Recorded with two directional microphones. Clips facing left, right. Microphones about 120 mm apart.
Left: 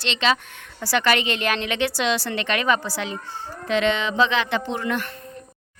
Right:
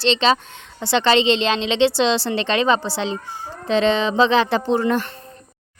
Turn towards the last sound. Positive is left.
turn(degrees=-35)  # may be behind; listen again after turning